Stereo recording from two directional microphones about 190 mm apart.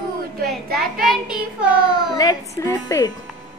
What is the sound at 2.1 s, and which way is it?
Speech, 20° left (ahead or behind).